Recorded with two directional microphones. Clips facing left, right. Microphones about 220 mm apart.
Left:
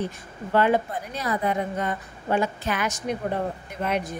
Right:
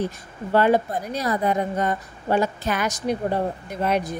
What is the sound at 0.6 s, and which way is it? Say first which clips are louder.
A woman's voice: right 3 dB; 40° right (ahead or behind).